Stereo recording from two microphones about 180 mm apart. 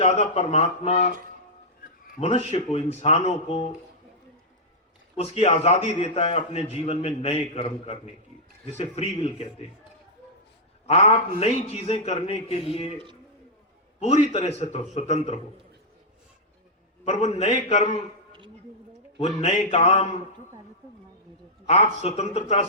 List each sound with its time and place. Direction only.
0.0 s a man's voice: 40° left (ahead or behind)
2.1 s a man's voice: 40° left (ahead or behind)
5.1 s a man's voice: 35° left (ahead or behind)
10.8 s a man's voice: 40° left (ahead or behind)
14.0 s a man's voice: 35° left (ahead or behind)
17.1 s a man's voice: 40° left (ahead or behind)
18.3 s a sound: 25° right (ahead or behind)
19.1 s a man's voice: 40° left (ahead or behind)
21.7 s a man's voice: 35° left (ahead or behind)